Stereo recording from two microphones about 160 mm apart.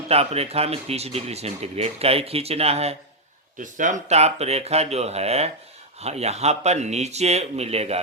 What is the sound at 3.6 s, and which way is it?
Speech, 55° right (ahead or behind).